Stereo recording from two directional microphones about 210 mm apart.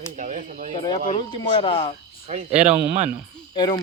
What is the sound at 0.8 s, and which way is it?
Speech, 20° left (ahead or behind).